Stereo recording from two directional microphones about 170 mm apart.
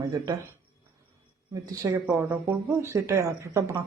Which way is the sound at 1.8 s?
15° right (ahead or behind).